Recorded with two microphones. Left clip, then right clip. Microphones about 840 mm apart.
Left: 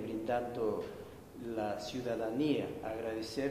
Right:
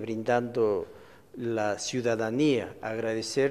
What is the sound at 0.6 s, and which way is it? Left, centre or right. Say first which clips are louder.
A man's voice: right 9 dB; right.